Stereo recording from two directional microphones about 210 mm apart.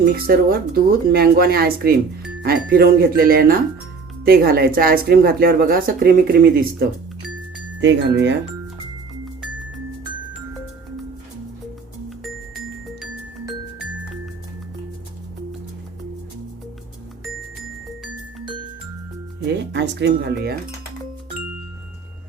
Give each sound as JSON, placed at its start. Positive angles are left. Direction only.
{"t": 0.0, "sound": "speech", "side_deg": -45}
{"t": 7.8, "sound": "chime", "side_deg": -55}
{"t": 19.5, "sound": "speech", "side_deg": -55}